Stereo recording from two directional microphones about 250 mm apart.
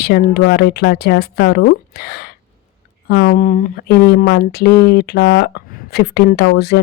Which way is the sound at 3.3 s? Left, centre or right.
Left.